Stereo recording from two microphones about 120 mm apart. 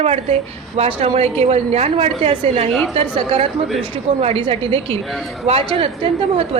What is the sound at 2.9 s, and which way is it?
Speech, 45° right (ahead or behind).